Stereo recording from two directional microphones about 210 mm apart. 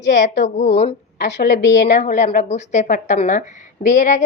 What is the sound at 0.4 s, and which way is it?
Speech, 35° left (ahead or behind).